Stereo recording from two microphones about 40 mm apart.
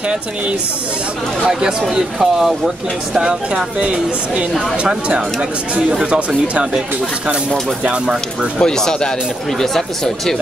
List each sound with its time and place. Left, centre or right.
1.5 s speech: centre
3.2 s speech: centre
8.5 s speech: centre